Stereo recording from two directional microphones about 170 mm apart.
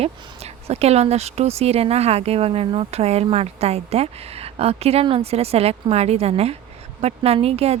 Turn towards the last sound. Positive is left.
turn(degrees=-35)  # may be behind; listen again after turning